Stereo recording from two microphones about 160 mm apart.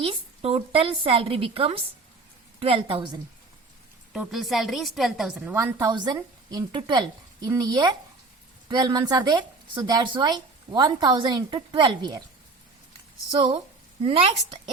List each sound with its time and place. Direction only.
0.0 s a woman's voice: 35° right (ahead or behind)
4.1 s speech: centre (ahead or behind)
5.5 s a woman's voice: 20° right (ahead or behind)
14.0 s a woman's voice: 35° right (ahead or behind)